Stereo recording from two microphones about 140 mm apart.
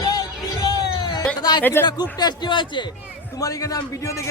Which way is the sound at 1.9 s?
30° left (ahead or behind).